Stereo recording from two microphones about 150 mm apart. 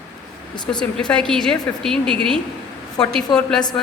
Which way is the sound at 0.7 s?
5° left (ahead or behind).